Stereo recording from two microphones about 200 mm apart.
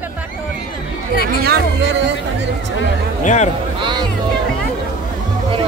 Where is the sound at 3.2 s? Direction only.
35° left (ahead or behind).